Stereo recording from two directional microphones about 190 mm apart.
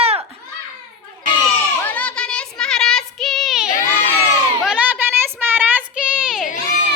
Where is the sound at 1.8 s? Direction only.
10° left (ahead or behind).